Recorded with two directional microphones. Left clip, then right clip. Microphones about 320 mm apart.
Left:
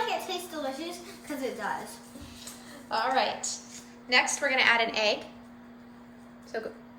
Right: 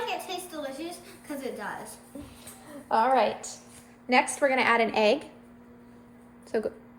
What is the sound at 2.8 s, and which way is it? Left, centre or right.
A woman's voice, centre.